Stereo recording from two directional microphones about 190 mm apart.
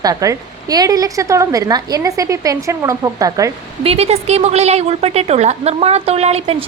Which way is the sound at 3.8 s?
30° right (ahead or behind).